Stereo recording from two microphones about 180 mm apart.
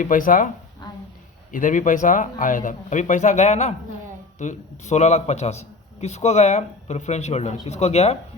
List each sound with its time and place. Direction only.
0.0 s a man's voice: 50° left (ahead or behind)
1.5 s a man's voice: 45° left (ahead or behind)